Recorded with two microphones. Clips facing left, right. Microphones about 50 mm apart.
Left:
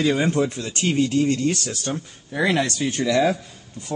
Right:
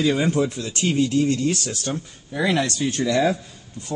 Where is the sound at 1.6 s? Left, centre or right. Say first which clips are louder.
Even; centre.